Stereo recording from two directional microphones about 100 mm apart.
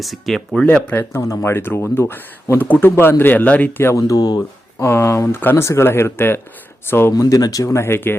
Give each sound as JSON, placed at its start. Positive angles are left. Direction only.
{"t": 0.0, "sound": "speech", "side_deg": 0}
{"t": 1.2, "sound": "speech", "side_deg": 30}
{"t": 3.9, "sound": "speech", "side_deg": 35}
{"t": 4.9, "sound": "speech", "side_deg": 25}
{"t": 7.1, "sound": "speech", "side_deg": 35}